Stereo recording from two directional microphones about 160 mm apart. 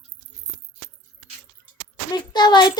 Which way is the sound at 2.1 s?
25° left (ahead or behind).